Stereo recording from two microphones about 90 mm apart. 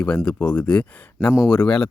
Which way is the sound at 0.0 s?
20° left (ahead or behind).